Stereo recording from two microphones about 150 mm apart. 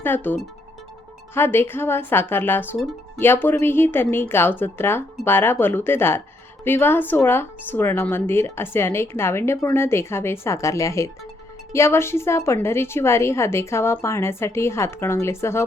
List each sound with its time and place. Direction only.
0.0 s speech: 15° left (ahead or behind)